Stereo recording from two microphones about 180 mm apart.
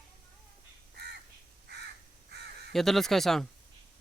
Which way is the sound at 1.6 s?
65° right (ahead or behind).